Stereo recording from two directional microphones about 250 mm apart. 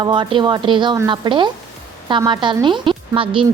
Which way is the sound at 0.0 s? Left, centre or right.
Centre.